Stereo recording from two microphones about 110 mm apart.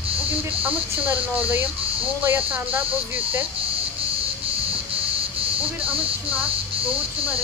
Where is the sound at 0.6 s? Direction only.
15° right (ahead or behind).